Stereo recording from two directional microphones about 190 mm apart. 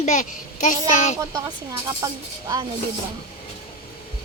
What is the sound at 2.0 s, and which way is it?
Speech, 20° right (ahead or behind).